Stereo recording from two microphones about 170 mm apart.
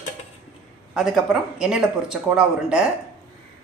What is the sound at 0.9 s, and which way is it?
Speech, centre (ahead or behind).